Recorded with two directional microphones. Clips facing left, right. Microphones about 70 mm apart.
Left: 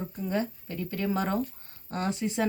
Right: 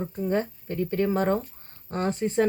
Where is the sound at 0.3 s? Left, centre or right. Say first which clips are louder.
Right 3 dB; right.